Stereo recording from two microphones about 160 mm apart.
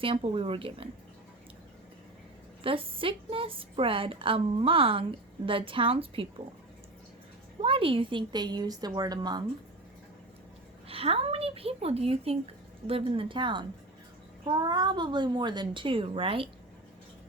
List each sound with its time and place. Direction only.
0.0 s a woman's voice: 35° right (ahead or behind)
2.6 s a woman's voice: 35° right (ahead or behind)
7.6 s a woman's voice: 35° right (ahead or behind)
10.8 s a woman's voice: 35° right (ahead or behind)